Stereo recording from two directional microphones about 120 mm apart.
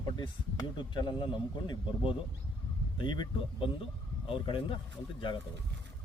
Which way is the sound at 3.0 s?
40° left (ahead or behind).